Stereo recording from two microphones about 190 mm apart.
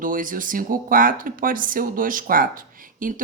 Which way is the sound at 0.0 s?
45° right (ahead or behind).